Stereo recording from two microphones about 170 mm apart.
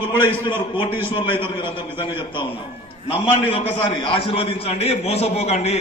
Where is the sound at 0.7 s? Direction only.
30° left (ahead or behind).